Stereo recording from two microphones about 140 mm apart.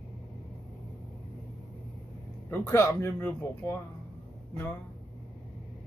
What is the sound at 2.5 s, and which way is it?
Speech, 20° left (ahead or behind).